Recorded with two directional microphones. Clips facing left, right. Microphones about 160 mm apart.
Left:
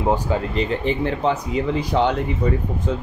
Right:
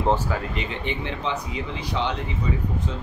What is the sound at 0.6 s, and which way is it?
Speech, 40° left (ahead or behind).